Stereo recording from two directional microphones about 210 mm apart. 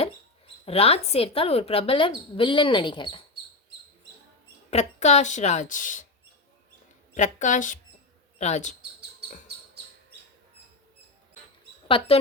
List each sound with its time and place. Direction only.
0.6 s speech: 30° left (ahead or behind)
4.7 s a woman's voice: 30° left (ahead or behind)
7.1 s a woman's voice: 35° left (ahead or behind)
11.9 s speech: 25° left (ahead or behind)